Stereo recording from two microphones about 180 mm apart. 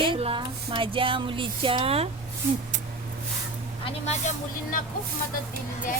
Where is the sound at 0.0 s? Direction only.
30° right (ahead or behind).